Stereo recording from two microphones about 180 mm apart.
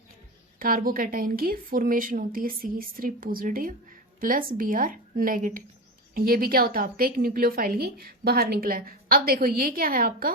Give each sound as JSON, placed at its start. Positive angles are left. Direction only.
{"t": 0.6, "sound": "a woman's voice", "side_deg": -55}